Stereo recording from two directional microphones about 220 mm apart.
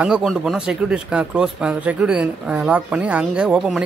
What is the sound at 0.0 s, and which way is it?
Speech, 5° right (ahead or behind).